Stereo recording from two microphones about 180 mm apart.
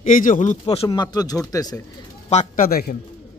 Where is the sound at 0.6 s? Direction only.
35° left (ahead or behind).